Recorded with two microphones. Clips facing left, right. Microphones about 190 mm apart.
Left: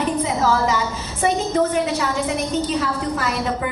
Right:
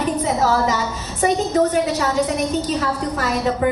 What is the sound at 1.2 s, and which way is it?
A woman's voice, 40° right (ahead or behind).